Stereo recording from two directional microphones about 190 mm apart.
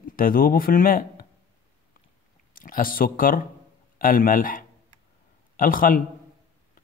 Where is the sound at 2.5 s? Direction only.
50° left (ahead or behind).